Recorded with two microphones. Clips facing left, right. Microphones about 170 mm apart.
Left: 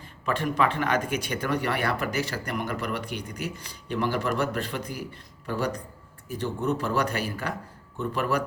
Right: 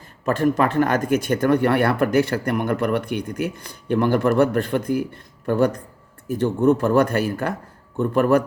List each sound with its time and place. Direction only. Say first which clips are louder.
0.3 s speech: right 6 dB; 45° right (ahead or behind)